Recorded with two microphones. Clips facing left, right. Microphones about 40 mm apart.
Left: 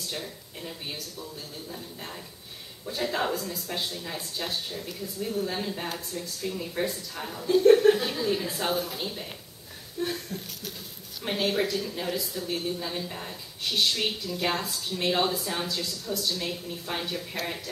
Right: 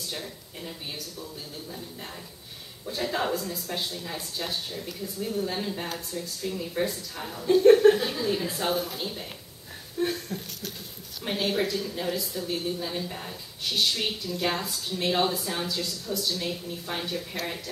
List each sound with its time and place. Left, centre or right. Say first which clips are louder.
0.1 s speech: even; centre
2.8 s speech: even; centre
10.0 s a sound: right 3 dB; right
11.2 s speech: even; centre